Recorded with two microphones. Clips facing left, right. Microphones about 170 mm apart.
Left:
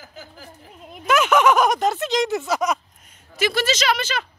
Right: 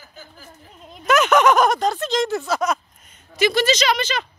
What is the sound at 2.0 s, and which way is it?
Speech, 20° left (ahead or behind).